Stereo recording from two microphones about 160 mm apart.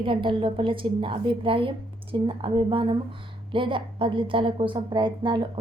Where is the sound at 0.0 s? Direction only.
30° right (ahead or behind).